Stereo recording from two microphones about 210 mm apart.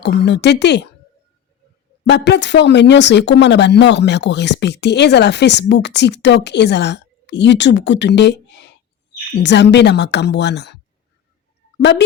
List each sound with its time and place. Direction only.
0.0 s speech: 55° left (ahead or behind)
2.0 s a woman's voice: 55° left (ahead or behind)
11.8 s speech: 55° left (ahead or behind)